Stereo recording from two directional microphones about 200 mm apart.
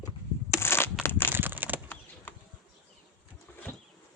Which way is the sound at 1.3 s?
10° right (ahead or behind).